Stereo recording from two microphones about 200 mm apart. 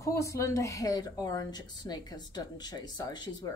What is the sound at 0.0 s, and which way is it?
Speech, 15° left (ahead or behind).